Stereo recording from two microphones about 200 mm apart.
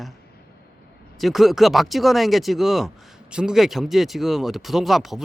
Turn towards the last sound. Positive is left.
turn(degrees=0)  # may be behind; listen again after turning